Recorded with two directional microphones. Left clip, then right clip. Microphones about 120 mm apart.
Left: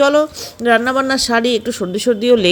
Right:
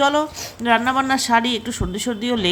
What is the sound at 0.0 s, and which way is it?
A woman's voice, 25° left (ahead or behind).